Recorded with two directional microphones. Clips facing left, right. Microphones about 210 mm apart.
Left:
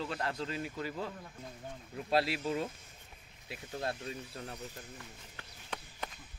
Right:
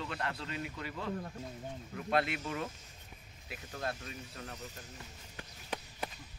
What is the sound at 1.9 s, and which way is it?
Speech, 30° left (ahead or behind).